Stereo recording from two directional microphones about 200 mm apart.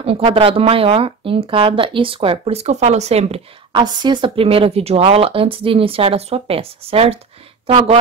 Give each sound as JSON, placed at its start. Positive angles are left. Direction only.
{"t": 0.0, "sound": "speech", "side_deg": -30}